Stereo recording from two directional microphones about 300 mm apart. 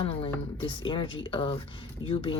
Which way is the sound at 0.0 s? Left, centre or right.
Centre.